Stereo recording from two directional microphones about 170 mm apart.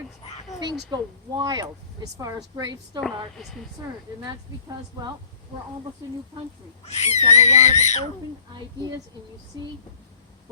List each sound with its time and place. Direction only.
0.6 s speech: 25° right (ahead or behind)
6.8 s speech: 40° left (ahead or behind)